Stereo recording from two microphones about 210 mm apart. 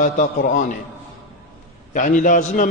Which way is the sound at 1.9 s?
40° left (ahead or behind).